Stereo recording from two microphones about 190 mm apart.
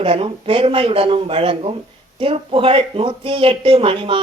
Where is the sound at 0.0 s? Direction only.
30° right (ahead or behind).